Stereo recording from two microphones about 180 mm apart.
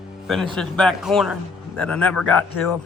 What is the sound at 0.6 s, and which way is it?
A man's voice, centre (ahead or behind).